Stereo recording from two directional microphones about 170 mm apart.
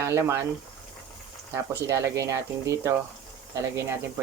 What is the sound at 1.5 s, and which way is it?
Speech, 15° right (ahead or behind).